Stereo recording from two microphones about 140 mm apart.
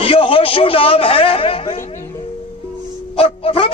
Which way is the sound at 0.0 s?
40° left (ahead or behind).